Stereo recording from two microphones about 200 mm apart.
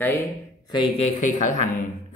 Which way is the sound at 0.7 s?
25° left (ahead or behind).